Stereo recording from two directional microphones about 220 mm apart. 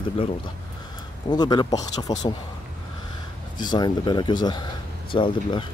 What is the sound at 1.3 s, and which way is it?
Speech, 20° left (ahead or behind).